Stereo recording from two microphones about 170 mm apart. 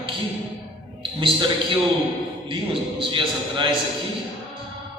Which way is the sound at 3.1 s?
30° right (ahead or behind).